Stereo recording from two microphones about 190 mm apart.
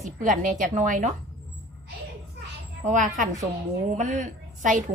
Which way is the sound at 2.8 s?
40° right (ahead or behind).